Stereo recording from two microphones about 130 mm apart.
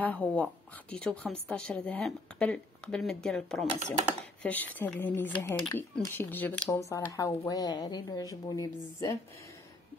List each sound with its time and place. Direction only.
0.0 s speech: 10° left (ahead or behind)
6.9 s a woman's voice: 25° left (ahead or behind)